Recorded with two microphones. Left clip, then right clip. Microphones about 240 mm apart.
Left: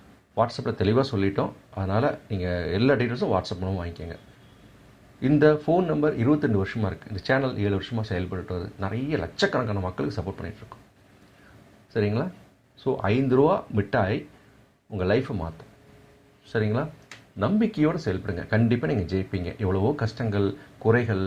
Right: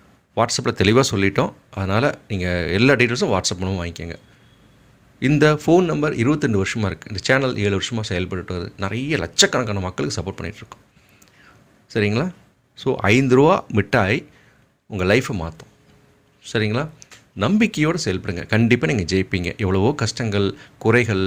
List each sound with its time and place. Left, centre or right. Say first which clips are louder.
0.3 s speech: right 6 dB; right
5.2 s speech: right 3 dB; right
11.9 s speech: right 5 dB; right